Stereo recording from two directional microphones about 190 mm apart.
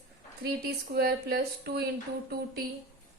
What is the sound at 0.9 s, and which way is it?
Speech, 55° right (ahead or behind).